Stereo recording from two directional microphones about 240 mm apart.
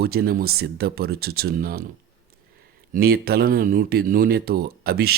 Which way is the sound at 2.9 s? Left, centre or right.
Right.